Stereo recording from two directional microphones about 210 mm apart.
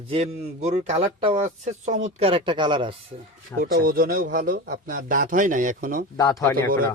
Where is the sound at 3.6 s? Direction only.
45° right (ahead or behind).